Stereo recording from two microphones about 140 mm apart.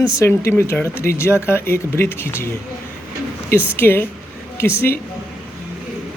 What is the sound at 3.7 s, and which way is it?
Speech, 15° left (ahead or behind).